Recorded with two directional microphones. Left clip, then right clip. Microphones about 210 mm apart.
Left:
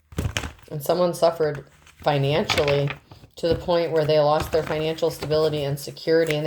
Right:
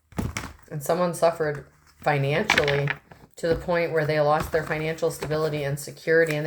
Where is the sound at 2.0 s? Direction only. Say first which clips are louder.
Left 1 dB; 30° left (ahead or behind).